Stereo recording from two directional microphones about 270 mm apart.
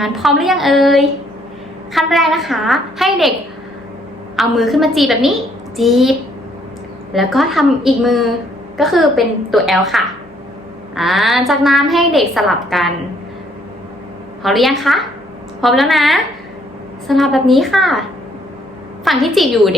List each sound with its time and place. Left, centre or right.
0.0 s a woman's voice: centre
4.4 s a woman's voice: centre
14.4 s a woman's voice: centre
19.0 s a woman's voice: centre